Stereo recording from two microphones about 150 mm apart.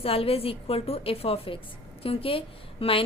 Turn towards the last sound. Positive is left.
turn(degrees=35)  # may be behind; listen again after turning